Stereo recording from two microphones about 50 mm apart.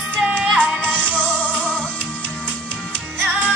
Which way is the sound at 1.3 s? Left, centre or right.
Left.